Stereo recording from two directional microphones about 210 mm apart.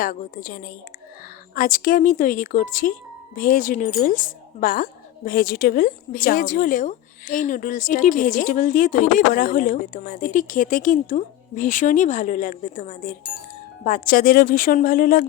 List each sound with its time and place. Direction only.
0.0 s a woman's voice: 40° left (ahead or behind)